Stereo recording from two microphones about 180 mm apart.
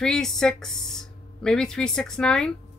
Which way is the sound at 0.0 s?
5° left (ahead or behind).